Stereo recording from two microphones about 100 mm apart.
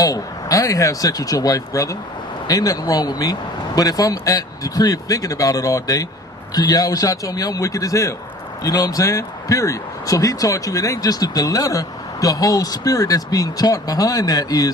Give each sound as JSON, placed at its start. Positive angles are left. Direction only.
{"t": 0.0, "sound": "speech", "side_deg": 35}